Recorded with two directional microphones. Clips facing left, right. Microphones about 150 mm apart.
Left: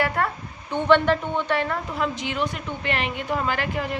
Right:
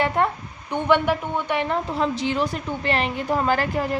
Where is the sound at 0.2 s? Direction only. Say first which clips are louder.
Right 4 dB; 20° right (ahead or behind).